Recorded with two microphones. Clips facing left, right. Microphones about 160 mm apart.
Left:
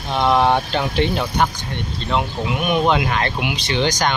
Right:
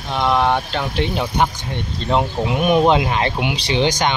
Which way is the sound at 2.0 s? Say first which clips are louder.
Right 3 dB; 35° right (ahead or behind).